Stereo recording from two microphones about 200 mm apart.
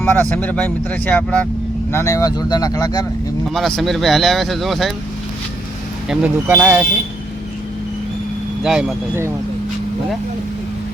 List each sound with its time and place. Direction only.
0.0 s speech: 10° left (ahead or behind)
3.5 s speech: centre (ahead or behind)
6.1 s speech: 5° right (ahead or behind)
8.6 s speech: centre (ahead or behind)